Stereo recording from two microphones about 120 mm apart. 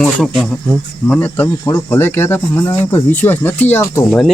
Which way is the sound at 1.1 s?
15° left (ahead or behind).